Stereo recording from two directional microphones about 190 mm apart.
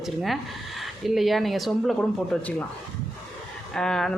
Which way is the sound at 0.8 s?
Centre (ahead or behind).